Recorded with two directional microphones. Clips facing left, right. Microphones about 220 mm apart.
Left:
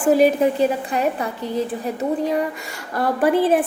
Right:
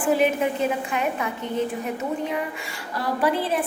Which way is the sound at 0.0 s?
40° left (ahead or behind).